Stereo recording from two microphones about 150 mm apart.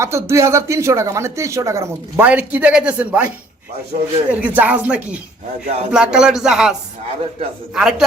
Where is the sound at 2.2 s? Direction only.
10° right (ahead or behind).